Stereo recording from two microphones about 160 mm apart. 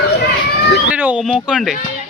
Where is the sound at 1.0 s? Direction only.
5° right (ahead or behind).